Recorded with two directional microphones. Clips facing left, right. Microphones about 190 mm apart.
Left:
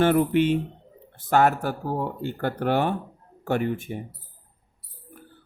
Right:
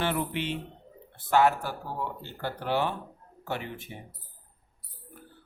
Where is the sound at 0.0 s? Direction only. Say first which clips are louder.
Left 11 dB; 50° left (ahead or behind).